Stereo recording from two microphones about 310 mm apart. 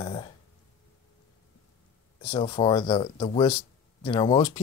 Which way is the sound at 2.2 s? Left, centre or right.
Centre.